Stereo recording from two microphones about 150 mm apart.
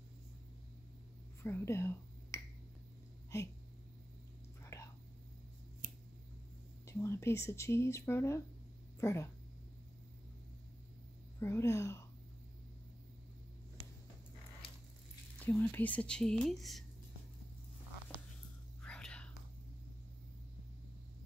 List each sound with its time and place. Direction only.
1.4 s speech: 15° left (ahead or behind)
4.7 s whispering: 20° left (ahead or behind)
6.9 s speech: 20° left (ahead or behind)
11.3 s speech: 15° left (ahead or behind)
15.3 s speech: 10° left (ahead or behind)
18.8 s whispering: 5° left (ahead or behind)